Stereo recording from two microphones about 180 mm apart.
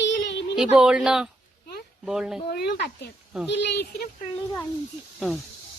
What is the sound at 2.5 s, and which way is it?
Speech, 65° left (ahead or behind).